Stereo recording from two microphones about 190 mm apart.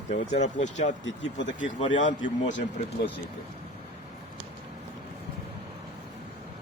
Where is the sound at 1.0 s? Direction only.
75° left (ahead or behind).